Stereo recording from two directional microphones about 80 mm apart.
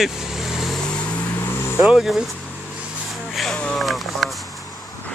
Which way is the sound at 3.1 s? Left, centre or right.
Centre.